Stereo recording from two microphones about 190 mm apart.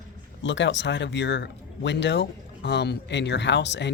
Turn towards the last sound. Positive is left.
turn(degrees=65)  # may be behind; listen again after turning